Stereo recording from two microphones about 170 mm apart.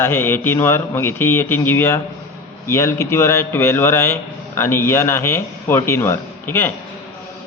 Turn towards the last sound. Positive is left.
turn(degrees=15)  # may be behind; listen again after turning